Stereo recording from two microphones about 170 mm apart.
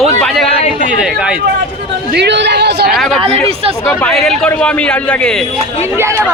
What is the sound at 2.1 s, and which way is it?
Speech, 90° right.